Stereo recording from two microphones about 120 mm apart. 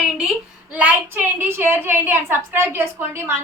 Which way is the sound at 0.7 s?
10° right (ahead or behind).